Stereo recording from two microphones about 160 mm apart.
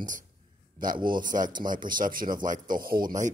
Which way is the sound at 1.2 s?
55° right (ahead or behind).